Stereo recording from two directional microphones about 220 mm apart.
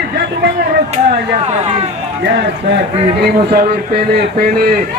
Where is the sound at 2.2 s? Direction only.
50° right (ahead or behind).